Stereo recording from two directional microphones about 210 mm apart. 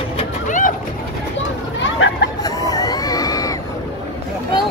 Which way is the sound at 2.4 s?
15° left (ahead or behind).